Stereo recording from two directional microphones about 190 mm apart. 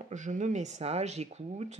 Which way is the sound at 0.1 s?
40° right (ahead or behind).